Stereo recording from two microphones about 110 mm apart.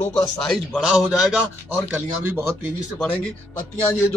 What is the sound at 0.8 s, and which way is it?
Speech, 5° right (ahead or behind).